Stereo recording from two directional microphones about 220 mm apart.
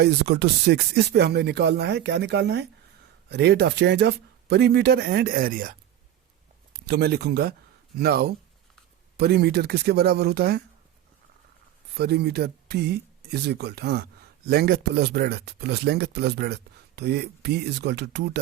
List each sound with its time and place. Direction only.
0.0 s speech: 50° right (ahead or behind)
6.7 s speech: 50° right (ahead or behind)
11.9 s speech: 45° right (ahead or behind)